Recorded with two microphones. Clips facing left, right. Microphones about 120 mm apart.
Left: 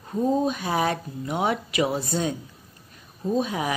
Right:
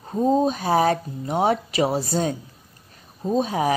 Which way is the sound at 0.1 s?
25° right (ahead or behind).